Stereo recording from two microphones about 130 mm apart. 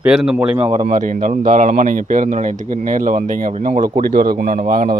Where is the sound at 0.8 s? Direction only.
80° right.